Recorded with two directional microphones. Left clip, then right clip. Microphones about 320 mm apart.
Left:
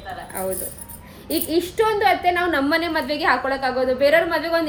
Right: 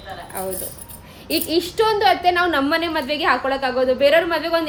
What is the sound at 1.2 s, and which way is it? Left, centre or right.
Speech, centre.